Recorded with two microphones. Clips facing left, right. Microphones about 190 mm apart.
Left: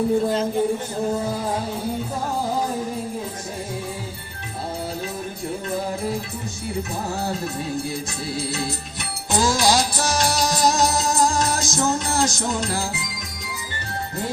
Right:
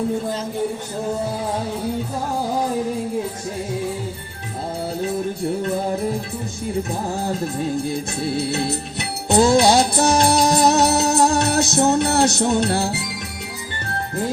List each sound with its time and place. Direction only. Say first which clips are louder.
8.4 s music: right 3 dB; 60° right (ahead or behind)